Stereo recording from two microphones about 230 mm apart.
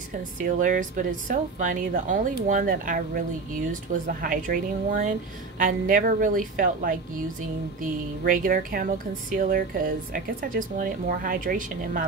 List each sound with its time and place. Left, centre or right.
0.4 s speech: right